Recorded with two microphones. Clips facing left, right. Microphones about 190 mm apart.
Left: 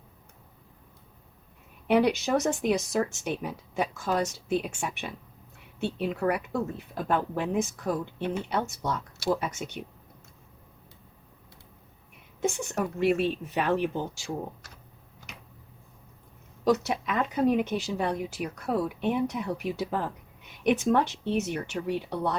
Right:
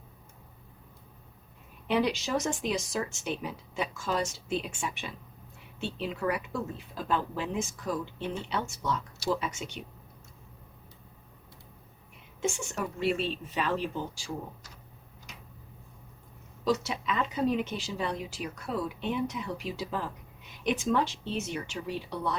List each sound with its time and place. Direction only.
1.9 s speech: 55° left (ahead or behind)
12.4 s speech: 55° left (ahead or behind)
16.6 s speech: 55° left (ahead or behind)